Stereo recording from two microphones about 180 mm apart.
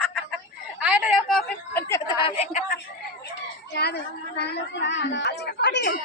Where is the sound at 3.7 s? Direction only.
70° left (ahead or behind).